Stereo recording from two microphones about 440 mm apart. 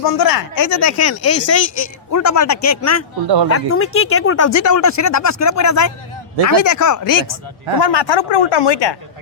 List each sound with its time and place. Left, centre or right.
0.0 s speech: left
7.8 s speech: left